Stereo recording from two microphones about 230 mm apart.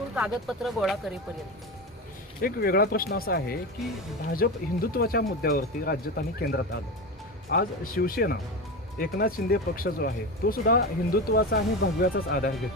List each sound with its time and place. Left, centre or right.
0.2 s speech: centre
2.4 s speech: left